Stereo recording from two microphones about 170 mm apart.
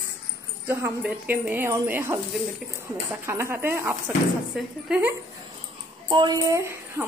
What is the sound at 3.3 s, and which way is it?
Speech, 15° right (ahead or behind).